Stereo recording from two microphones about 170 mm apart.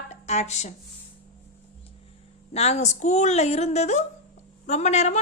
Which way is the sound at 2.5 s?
40° left (ahead or behind).